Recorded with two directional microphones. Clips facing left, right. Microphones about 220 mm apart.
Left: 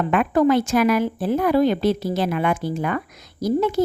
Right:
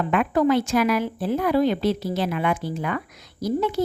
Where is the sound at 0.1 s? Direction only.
50° left (ahead or behind).